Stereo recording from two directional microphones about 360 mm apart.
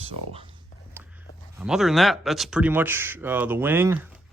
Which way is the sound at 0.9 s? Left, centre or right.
Centre.